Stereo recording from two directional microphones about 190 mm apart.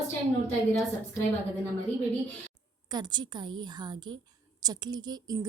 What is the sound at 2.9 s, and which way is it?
Speech, 20° right (ahead or behind).